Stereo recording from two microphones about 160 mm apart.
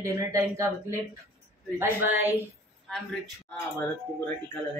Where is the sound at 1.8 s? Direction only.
15° right (ahead or behind).